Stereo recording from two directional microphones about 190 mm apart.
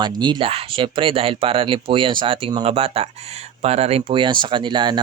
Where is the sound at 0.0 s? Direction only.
25° right (ahead or behind).